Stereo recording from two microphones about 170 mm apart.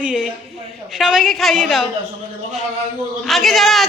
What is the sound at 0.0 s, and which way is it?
A woman's voice, 5° right (ahead or behind).